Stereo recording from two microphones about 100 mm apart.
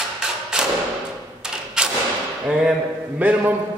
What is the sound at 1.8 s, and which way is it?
Thump, 10° right (ahead or behind).